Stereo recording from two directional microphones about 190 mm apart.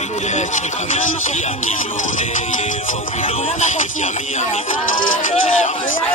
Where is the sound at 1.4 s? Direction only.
40° left (ahead or behind).